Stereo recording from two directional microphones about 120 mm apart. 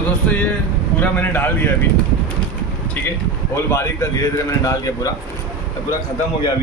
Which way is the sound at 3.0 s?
20° left (ahead or behind).